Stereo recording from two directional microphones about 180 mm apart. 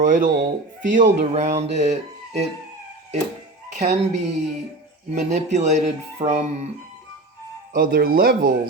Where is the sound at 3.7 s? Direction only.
40° right (ahead or behind).